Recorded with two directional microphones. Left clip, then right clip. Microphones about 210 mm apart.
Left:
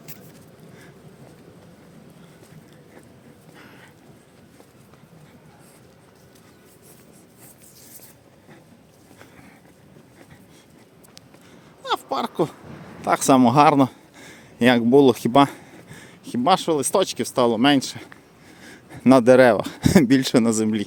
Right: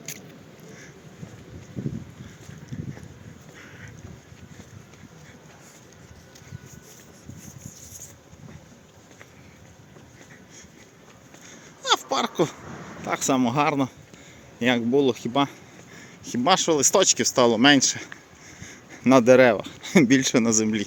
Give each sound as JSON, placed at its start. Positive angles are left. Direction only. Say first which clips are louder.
{"t": 11.8, "sound": "a sound", "louder": "right 2 dB", "side_deg": 5}
{"t": 13.1, "sound": "a man's voice", "louder": "left 7 dB", "side_deg": 30}
{"t": 16.0, "sound": "speech", "louder": "left 2 dB", "side_deg": 15}
{"t": 18.6, "sound": "speech", "louder": "left 4 dB", "side_deg": 20}